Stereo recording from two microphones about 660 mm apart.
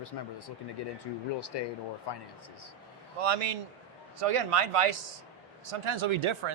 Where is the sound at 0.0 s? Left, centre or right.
Left.